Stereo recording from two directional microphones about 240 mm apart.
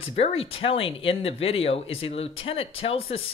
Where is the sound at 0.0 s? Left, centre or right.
Left.